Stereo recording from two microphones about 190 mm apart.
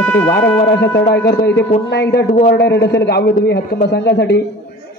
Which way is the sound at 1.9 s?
60° left (ahead or behind).